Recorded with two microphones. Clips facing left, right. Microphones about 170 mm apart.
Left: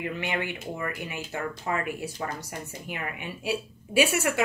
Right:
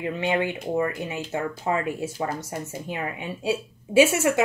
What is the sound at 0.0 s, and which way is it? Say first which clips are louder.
Speech: right 6 dB; 25° right (ahead or behind).